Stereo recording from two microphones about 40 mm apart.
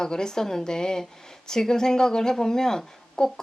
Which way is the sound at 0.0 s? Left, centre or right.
Centre.